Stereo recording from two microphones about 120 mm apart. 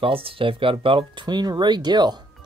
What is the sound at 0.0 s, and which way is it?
Speech, 50° right (ahead or behind).